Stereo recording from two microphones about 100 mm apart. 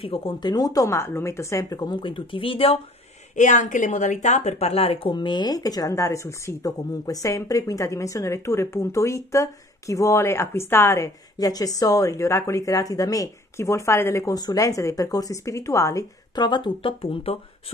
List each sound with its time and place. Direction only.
0.0 s speech: 65° left (ahead or behind)
0.4 s speech: 40° left (ahead or behind); by 2.8 s 65° left (ahead or behind)
4.4 s speech: 90° left; by 5.1 s 70° left (ahead or behind)
5.1 s speech: 50° left (ahead or behind); by 11.1 s 25° left (ahead or behind)
11.3 s speech: 40° left (ahead or behind)
14.3 s speech: 40° left (ahead or behind)
16.3 s speech: 50° left (ahead or behind); by 17.4 s 70° left (ahead or behind)